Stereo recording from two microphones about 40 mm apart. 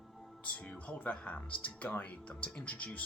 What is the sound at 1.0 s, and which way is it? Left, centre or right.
Speech, left.